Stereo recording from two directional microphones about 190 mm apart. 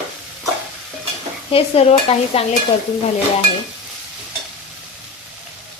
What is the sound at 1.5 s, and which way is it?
Stir, 30° left (ahead or behind).